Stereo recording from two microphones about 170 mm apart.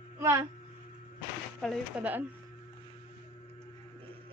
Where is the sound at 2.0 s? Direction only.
10° right (ahead or behind).